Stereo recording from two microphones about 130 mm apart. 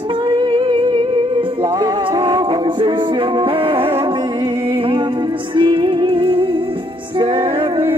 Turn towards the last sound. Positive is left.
turn(degrees=-45)  # may be behind; listen again after turning